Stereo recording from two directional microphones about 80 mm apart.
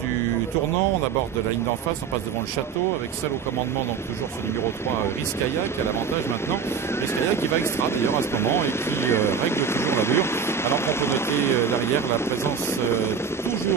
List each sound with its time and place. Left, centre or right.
7.2 s speech: left